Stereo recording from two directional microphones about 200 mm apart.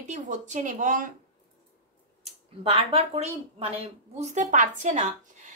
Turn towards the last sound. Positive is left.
turn(degrees=-35)  # may be behind; listen again after turning